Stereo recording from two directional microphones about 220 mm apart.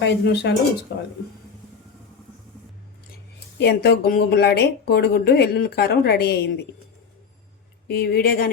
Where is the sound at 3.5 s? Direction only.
50° left (ahead or behind).